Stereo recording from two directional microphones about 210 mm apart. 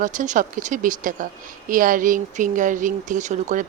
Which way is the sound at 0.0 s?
40° right (ahead or behind).